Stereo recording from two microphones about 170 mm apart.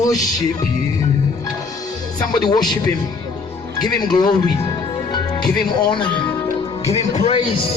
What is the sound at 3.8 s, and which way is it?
Speech, 25° left (ahead or behind).